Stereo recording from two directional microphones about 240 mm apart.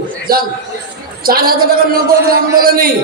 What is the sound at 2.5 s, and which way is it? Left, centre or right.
Speech, right.